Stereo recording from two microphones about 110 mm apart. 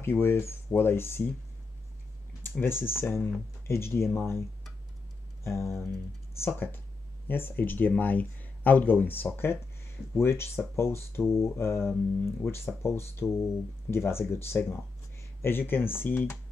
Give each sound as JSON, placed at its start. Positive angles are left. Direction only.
{"t": 0.0, "sound": "speech", "side_deg": 20}
{"t": 2.6, "sound": "speech", "side_deg": 20}